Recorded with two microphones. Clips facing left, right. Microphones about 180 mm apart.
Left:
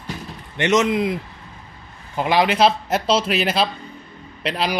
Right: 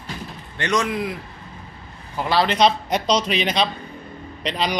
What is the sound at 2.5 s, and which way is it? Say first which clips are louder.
A man's voice: left 1 dB; 5° left (ahead or behind).